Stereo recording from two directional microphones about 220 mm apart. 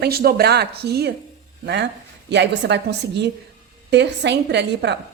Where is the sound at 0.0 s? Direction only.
45° right (ahead or behind).